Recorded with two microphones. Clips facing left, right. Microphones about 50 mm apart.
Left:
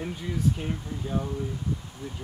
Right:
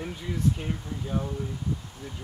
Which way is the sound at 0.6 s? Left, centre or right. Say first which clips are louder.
Left 1 dB; centre.